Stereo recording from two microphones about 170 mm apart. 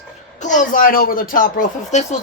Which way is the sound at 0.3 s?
45° left (ahead or behind).